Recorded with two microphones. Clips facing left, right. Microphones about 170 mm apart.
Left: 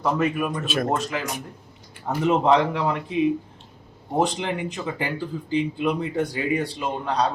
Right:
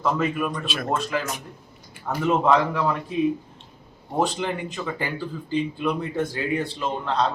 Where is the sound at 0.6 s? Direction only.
45° left (ahead or behind).